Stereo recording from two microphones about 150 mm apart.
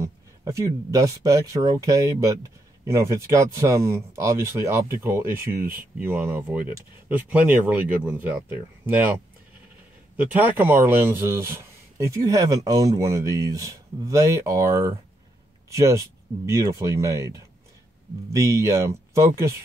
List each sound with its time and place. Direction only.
0.0 s speech: 20° right (ahead or behind)
10.1 s speech: 10° right (ahead or behind)
16.4 s speech: 20° right (ahead or behind)
18.3 s speech: 20° right (ahead or behind)